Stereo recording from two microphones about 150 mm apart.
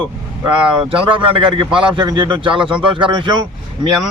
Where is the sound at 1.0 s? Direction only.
35° right (ahead or behind).